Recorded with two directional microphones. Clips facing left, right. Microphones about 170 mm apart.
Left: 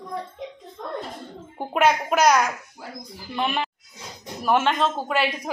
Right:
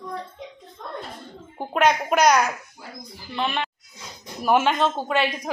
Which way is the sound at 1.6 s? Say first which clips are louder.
Even; 5° left (ahead or behind).